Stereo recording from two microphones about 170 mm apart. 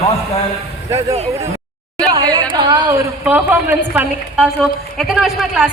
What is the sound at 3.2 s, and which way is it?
A woman's voice, 10° right (ahead or behind).